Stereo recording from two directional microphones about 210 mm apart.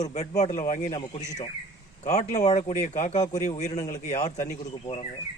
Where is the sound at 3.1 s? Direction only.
15° left (ahead or behind).